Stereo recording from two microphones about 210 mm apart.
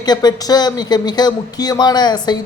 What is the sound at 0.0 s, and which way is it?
Speech, 20° left (ahead or behind).